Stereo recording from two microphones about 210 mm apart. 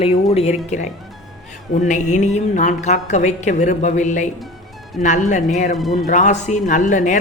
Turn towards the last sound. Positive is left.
turn(degrees=35)  # may be behind; listen again after turning